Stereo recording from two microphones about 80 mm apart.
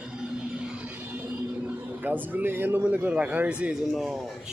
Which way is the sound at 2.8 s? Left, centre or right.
Centre.